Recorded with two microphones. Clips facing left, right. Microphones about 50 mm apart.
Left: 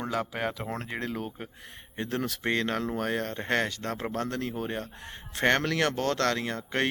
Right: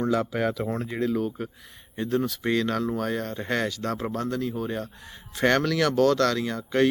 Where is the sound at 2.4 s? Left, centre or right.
Left.